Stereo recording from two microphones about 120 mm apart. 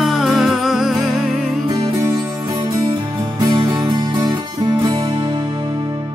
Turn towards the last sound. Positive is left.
turn(degrees=-35)  # may be behind; listen again after turning